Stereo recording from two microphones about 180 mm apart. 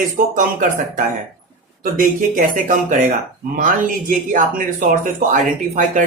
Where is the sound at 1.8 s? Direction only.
50° right (ahead or behind).